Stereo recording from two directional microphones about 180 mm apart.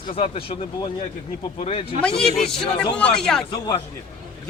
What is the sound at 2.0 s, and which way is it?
A man's voice, 5° left (ahead or behind).